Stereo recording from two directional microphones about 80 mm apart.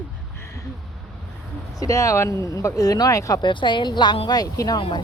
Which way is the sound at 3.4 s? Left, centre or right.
Left.